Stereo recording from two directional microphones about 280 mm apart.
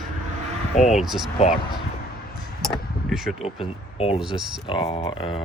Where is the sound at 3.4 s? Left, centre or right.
Left.